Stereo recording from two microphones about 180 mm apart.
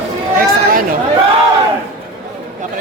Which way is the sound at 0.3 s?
50° right (ahead or behind).